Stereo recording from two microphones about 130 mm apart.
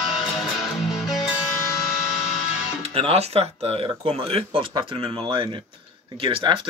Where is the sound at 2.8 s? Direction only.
50° right (ahead or behind).